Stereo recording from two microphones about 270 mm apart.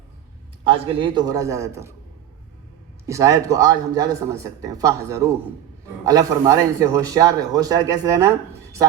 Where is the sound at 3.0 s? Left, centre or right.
Centre.